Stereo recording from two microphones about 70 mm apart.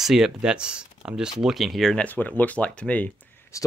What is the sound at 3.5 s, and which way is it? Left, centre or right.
Speech, left.